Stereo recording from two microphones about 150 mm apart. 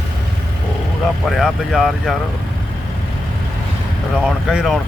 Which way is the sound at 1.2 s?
Centre (ahead or behind).